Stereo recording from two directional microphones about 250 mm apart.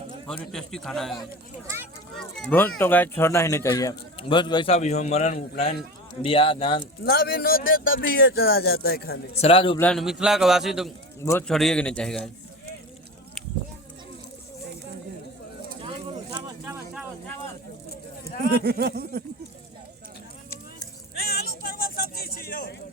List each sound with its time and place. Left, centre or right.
0.3 s a man's voice: centre; by 6.8 s left
7.0 s speech: left
9.4 s speech: left
9.8 s a man's voice: centre
11.2 s a man's voice: centre
16.3 s a sound: centre
18.6 s speech: right
21.2 s music: left